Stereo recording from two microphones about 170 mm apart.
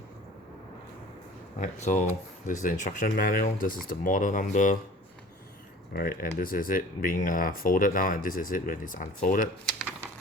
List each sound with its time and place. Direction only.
1.5 s speech: 45° left (ahead or behind)
5.9 s speech: 60° left (ahead or behind)